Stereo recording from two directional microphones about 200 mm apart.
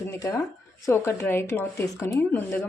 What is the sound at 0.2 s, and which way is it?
Speech, 15° left (ahead or behind).